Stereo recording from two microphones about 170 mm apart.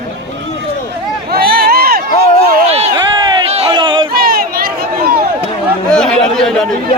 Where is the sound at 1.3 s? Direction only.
65° right (ahead or behind).